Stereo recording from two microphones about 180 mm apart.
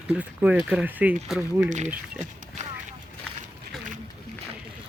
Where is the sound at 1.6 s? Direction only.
40° right (ahead or behind).